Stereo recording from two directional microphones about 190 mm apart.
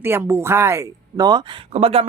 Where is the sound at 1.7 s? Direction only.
35° right (ahead or behind).